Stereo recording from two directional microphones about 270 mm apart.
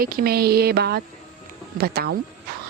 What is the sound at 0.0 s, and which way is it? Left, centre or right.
Speech, right.